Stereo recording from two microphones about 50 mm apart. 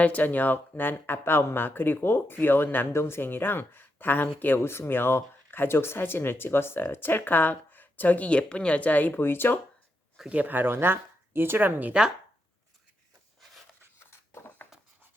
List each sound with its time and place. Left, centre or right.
0.0 s speech: left
2.7 s speech: left
4.6 s speech: left
9.1 s speech: left
10.2 s speech: right
10.5 s speech: right
14.1 s a sound: left